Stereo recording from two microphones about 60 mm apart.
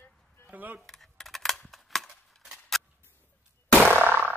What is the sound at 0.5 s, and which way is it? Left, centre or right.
Speech, right.